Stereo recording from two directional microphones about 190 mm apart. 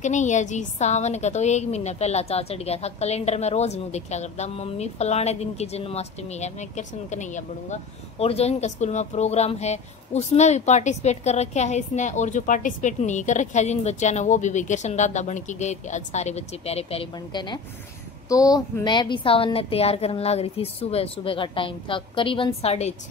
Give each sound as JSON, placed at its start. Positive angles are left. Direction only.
{"t": 0.0, "sound": "a woman's voice", "side_deg": 40}